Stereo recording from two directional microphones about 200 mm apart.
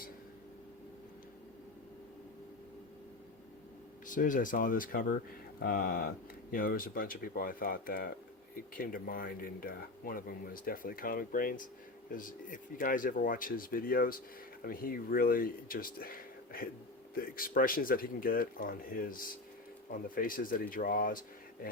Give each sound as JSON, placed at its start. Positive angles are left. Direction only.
{"t": 4.0, "sound": "speech", "side_deg": 40}